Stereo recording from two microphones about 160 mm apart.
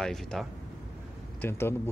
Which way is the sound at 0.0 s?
5° left (ahead or behind).